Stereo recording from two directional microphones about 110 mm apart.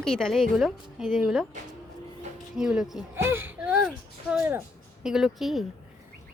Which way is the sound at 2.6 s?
5° right (ahead or behind).